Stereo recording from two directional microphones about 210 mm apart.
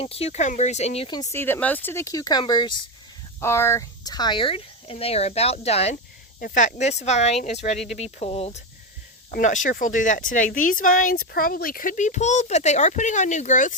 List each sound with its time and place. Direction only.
0.0 s speech: 30° left (ahead or behind)